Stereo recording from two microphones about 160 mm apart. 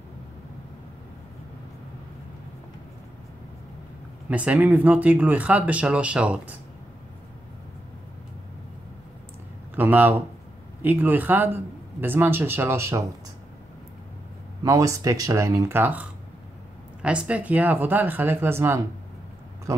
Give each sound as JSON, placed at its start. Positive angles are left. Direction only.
{"t": 4.3, "sound": "speech", "side_deg": -10}
{"t": 9.8, "sound": "speech", "side_deg": -10}
{"t": 14.6, "sound": "speech", "side_deg": -20}